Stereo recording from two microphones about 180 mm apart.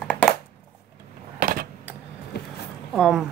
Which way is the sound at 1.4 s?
55° right (ahead or behind).